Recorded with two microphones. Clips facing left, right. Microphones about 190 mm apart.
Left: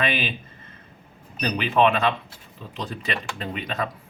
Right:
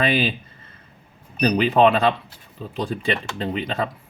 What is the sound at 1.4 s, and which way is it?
Speech, 40° right (ahead or behind).